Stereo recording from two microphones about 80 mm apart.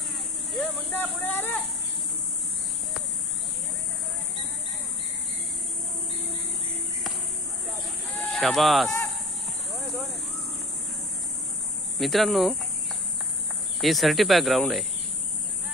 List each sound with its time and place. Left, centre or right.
0.5 s a sound: centre
1.2 s speech: left
8.1 s livestock: centre
8.4 s speech: centre
9.7 s a sound: centre
11.9 s speech: centre
13.8 s speech: centre